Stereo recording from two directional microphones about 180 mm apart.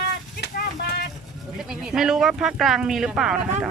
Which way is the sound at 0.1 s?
65° left (ahead or behind).